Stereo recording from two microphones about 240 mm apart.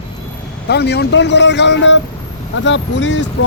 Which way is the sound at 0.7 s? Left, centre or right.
Left.